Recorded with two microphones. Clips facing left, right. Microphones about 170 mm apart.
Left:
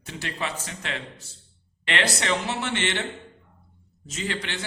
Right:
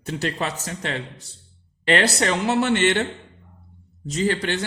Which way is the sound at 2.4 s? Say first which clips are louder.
Right 9 dB; 50° right (ahead or behind).